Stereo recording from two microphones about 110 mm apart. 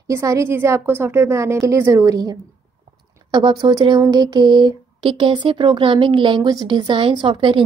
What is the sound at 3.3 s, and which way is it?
Speech, 40° right (ahead or behind).